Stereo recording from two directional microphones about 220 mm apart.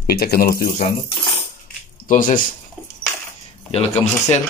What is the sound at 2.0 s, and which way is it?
Speech, 35° left (ahead or behind).